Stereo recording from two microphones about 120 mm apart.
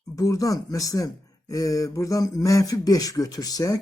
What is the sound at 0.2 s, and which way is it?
Speech, 30° left (ahead or behind).